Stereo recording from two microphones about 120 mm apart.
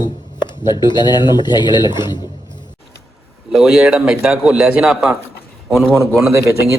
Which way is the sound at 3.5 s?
5° right (ahead or behind).